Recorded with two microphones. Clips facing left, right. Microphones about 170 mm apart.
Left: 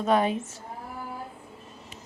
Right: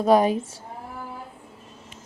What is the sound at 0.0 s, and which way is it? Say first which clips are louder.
Speech: right 5 dB; 35° right (ahead or behind).